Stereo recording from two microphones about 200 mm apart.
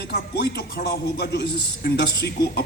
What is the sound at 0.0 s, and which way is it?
A man's voice, 50° left (ahead or behind).